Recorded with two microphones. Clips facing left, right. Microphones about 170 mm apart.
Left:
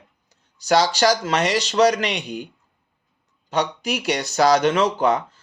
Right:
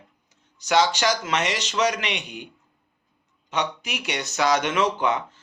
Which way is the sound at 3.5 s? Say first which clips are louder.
Left 5 dB; 35° left (ahead or behind).